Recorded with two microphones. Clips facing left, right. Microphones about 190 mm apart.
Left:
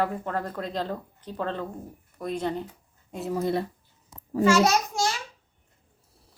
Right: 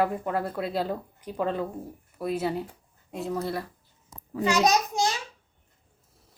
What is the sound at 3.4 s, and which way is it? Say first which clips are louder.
Speech: left 5 dB; 25° left (ahead or behind).